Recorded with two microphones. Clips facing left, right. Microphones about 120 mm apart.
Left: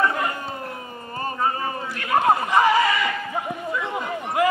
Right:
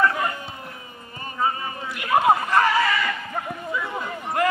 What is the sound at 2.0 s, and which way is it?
Speech, 10° right (ahead or behind).